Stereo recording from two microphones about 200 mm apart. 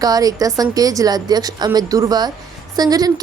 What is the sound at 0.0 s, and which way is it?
A woman's voice, 20° right (ahead or behind).